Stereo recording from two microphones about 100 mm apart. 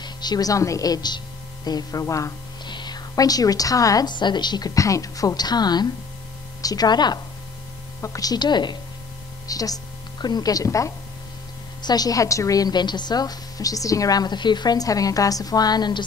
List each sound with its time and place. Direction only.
0.0 s a woman's voice: 45° left (ahead or behind)
2.6 s a woman's voice: 50° left (ahead or behind)